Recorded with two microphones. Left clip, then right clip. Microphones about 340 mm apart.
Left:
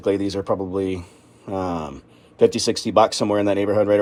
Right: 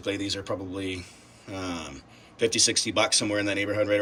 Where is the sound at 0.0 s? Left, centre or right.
Centre.